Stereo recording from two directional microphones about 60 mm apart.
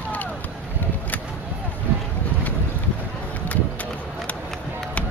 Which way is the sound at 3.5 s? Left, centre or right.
Left.